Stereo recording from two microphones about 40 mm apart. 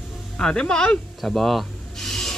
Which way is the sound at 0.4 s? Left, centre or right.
Left.